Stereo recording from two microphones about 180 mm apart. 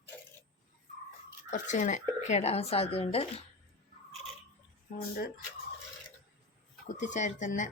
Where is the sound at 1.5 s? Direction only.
45° left (ahead or behind).